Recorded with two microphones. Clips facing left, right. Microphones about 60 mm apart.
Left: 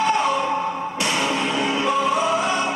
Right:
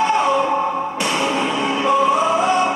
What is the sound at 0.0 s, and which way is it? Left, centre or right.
Music, centre.